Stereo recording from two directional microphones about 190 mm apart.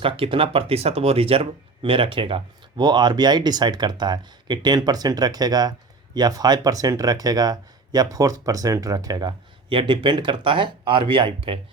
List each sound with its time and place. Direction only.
0.0 s speech: 30° right (ahead or behind)